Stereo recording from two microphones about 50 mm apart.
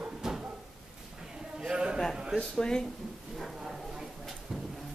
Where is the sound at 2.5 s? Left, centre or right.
Centre.